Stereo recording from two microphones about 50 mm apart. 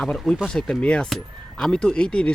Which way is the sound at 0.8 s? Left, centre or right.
Centre.